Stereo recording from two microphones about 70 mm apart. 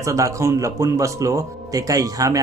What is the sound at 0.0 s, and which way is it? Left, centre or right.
Speech, right.